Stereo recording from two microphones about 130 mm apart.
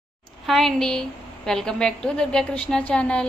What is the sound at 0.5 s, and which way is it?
A woman's voice, centre (ahead or behind).